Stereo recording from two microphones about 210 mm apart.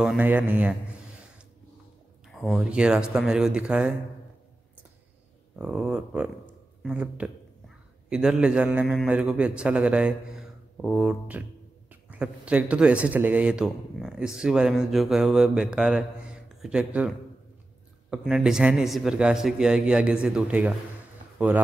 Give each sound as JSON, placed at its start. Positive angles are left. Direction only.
{"t": 0.0, "sound": "a man's voice", "side_deg": -5}
{"t": 2.2, "sound": "a man's voice", "side_deg": 0}
{"t": 5.6, "sound": "a man's voice", "side_deg": -5}
{"t": 18.1, "sound": "a man's voice", "side_deg": 0}